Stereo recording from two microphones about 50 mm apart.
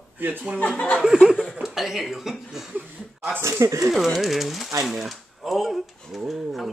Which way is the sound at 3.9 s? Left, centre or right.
Centre.